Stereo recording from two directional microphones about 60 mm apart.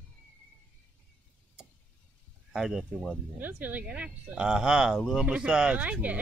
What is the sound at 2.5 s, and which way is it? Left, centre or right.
Speech, centre.